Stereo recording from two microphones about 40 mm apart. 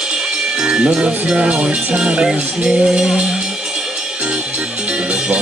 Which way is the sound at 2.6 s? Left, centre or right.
Centre.